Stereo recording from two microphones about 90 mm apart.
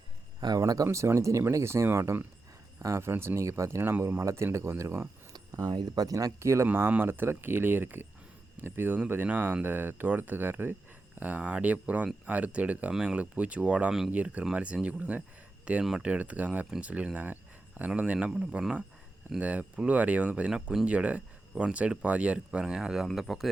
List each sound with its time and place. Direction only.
0.3 s speech: 50° right (ahead or behind)
0.7 s speech: 40° right (ahead or behind)
5.3 s speech: 45° right (ahead or behind)
6.7 s speech: 20° right (ahead or behind); by 23.5 s centre (ahead or behind)